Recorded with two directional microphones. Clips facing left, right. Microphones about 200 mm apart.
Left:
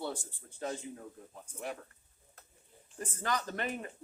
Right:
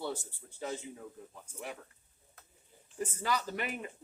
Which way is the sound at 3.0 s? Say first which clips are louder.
Even; 10° right (ahead or behind).